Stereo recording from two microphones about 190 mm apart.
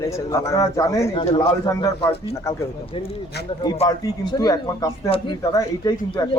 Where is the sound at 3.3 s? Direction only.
60° left (ahead or behind).